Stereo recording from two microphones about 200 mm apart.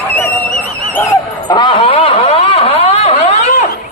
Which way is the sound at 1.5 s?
25° left (ahead or behind).